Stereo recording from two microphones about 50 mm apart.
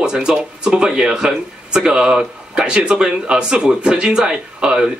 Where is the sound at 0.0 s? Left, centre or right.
Centre.